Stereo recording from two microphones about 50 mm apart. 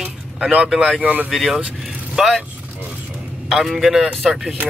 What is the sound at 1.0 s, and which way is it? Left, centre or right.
Speech, right.